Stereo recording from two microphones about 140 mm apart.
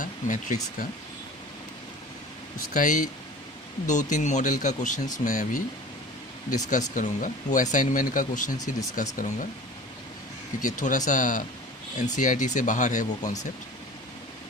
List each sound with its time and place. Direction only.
0.0 s speech: 65° left (ahead or behind)
2.7 s speech: 65° left (ahead or behind)
10.6 s speech: 65° left (ahead or behind)